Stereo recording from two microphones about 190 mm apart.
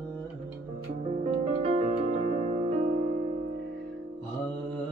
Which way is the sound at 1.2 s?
35° right (ahead or behind).